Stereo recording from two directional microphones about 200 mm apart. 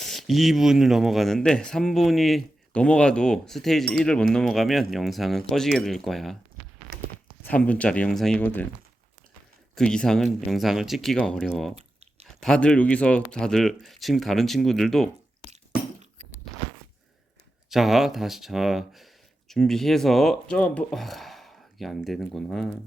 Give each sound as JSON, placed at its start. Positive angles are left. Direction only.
{"t": 0.0, "sound": "speech", "side_deg": 0}
{"t": 7.4, "sound": "speech", "side_deg": 5}
{"t": 9.7, "sound": "speech", "side_deg": 5}
{"t": 11.7, "sound": "chewing", "side_deg": -30}
{"t": 12.2, "sound": "speech", "side_deg": 5}
{"t": 17.7, "sound": "speech", "side_deg": 0}